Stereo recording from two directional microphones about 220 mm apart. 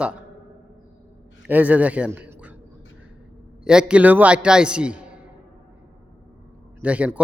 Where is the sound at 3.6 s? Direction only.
5° right (ahead or behind).